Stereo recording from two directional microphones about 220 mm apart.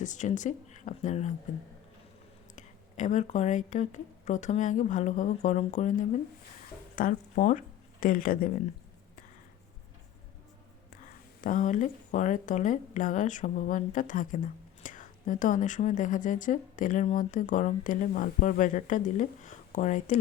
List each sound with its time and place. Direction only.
0.0 s speech: 35° left (ahead or behind)
2.6 s speech: 35° left (ahead or behind)
11.0 s speech: 35° left (ahead or behind)